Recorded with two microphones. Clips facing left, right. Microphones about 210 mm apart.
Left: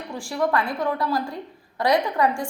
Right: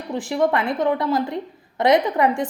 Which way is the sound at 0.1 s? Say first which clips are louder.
Right 4 dB; 20° right (ahead or behind).